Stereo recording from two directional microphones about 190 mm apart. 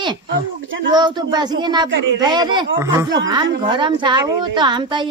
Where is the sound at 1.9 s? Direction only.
75° right (ahead or behind).